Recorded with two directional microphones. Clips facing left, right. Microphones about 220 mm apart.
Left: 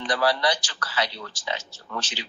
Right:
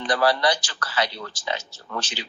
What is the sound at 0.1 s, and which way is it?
Speech, 50° right (ahead or behind).